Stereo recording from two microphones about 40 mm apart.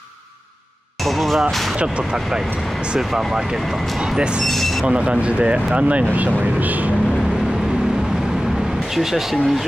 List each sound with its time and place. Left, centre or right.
1.0 s a sound: centre
3.0 s speech: centre
4.5 s speech: centre
4.8 s speech: right
8.9 s speech: centre